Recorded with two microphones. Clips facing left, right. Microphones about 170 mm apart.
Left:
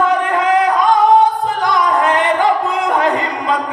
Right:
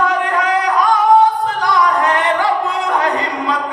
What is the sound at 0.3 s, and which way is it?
Singing, 20° left (ahead or behind).